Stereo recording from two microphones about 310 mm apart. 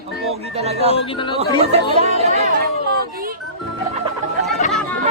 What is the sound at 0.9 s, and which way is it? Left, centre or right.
Speech, centre.